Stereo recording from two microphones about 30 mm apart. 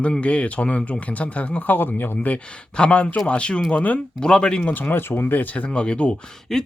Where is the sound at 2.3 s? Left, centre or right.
Left.